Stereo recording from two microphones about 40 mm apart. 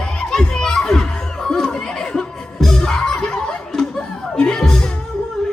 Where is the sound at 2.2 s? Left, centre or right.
Centre.